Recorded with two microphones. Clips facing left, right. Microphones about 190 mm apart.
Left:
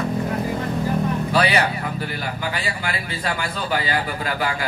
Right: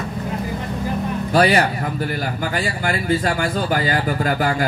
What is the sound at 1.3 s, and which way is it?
Music, 45° right (ahead or behind).